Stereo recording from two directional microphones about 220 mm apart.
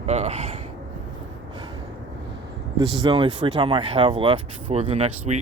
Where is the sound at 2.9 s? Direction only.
20° right (ahead or behind).